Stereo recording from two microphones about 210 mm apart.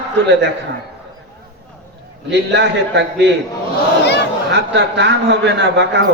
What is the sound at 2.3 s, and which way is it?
Speech, 55° right (ahead or behind).